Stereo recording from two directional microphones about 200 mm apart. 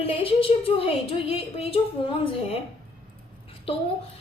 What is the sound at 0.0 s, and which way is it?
A woman's voice, 25° left (ahead or behind).